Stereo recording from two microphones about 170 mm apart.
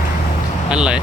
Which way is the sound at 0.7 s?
5° right (ahead or behind).